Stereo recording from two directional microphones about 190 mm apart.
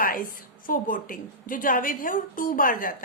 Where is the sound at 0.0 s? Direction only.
50° left (ahead or behind).